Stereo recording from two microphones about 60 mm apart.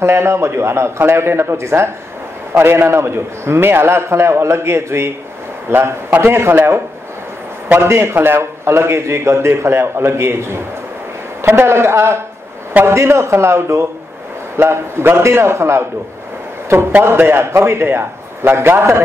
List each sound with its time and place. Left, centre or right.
0.0 s a man's voice: right
7.8 s a man's voice: right
17.0 s a man's voice: right